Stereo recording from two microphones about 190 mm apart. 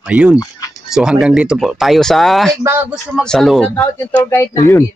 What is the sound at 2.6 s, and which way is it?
Speech, 15° right (ahead or behind).